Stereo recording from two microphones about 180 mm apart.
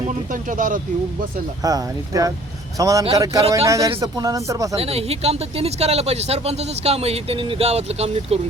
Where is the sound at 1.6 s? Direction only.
20° right (ahead or behind).